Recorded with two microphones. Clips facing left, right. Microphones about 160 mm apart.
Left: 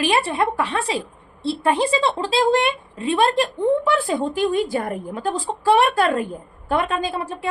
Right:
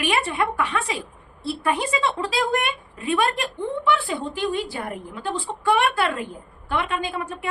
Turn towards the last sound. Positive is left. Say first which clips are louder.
# left 3 dB
turn(degrees=35)  # may be behind; listen again after turning